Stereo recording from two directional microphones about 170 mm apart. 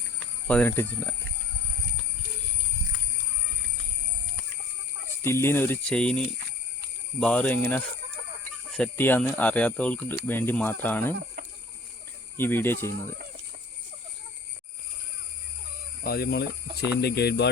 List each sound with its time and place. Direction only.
0.4 s speech: 10° left (ahead or behind)
5.2 s speech: 15° left (ahead or behind)
8.7 s speech: 10° left (ahead or behind)
12.4 s speech: 10° left (ahead or behind)
16.0 s speech: 65° left (ahead or behind)